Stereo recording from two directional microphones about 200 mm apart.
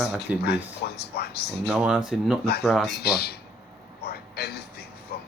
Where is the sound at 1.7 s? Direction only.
5° right (ahead or behind).